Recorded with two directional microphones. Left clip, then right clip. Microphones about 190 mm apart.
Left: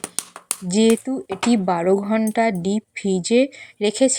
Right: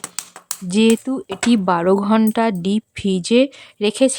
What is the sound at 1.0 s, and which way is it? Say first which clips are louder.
Speech: right 2 dB; 25° right (ahead or behind).